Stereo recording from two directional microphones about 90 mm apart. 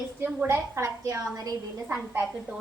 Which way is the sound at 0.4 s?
35° right (ahead or behind).